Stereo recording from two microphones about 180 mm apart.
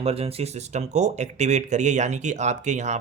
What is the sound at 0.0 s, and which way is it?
Speech, 35° right (ahead or behind).